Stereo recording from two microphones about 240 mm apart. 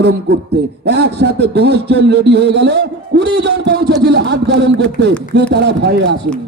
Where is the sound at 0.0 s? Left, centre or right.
Right.